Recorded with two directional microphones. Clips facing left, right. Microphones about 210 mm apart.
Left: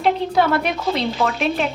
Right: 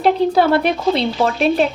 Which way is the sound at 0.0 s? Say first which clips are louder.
Right 4 dB; 35° right (ahead or behind).